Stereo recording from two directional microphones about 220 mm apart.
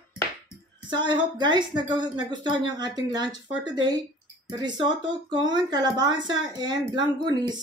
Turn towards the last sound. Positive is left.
turn(degrees=-20)  # may be behind; listen again after turning